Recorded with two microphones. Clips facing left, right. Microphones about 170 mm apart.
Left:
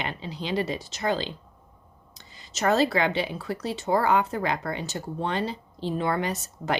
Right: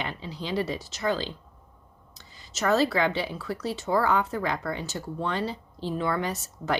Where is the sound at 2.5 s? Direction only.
20° left (ahead or behind).